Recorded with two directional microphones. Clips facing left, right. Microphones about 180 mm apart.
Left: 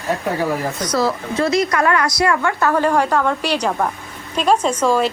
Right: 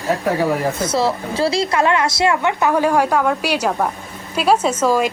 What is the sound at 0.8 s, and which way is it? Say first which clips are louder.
A woman's voice: right 1 dB; 25° right (ahead or behind).